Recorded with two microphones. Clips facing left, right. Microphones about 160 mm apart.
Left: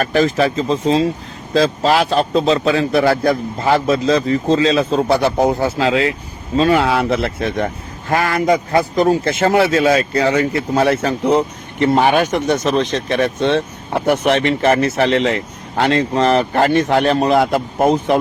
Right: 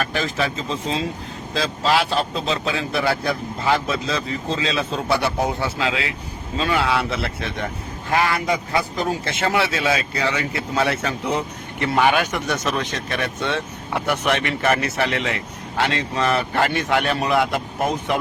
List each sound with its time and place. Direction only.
0.0 s speech: 40° left (ahead or behind); by 12.8 s 25° left (ahead or behind)
13.1 s speech: 50° left (ahead or behind)
14.4 s speech: 25° left (ahead or behind)
15.7 s speech: 40° left (ahead or behind)